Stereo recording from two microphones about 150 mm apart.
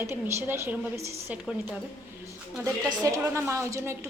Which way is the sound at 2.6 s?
20° right (ahead or behind).